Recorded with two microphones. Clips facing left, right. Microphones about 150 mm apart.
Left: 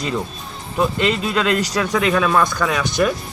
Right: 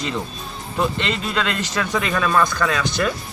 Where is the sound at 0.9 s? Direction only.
5° left (ahead or behind).